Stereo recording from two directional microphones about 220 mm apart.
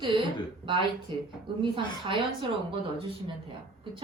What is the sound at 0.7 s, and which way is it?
A woman's voice, 20° right (ahead or behind).